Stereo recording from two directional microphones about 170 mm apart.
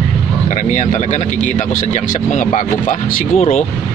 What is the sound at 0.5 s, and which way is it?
Speech, 45° left (ahead or behind).